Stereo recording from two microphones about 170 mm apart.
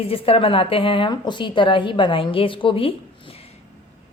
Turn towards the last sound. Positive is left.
turn(degrees=35)  # may be behind; listen again after turning